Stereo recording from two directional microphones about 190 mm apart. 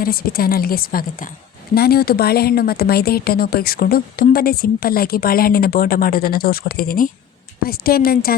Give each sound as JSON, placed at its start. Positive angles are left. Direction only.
{"t": 0.0, "sound": "speech", "side_deg": 50}